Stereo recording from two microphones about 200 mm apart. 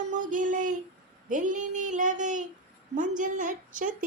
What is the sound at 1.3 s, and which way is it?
Child singing, 40° right (ahead or behind).